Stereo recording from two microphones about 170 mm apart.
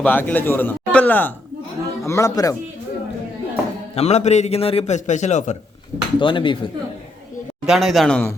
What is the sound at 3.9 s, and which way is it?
A man's voice, 40° left (ahead or behind).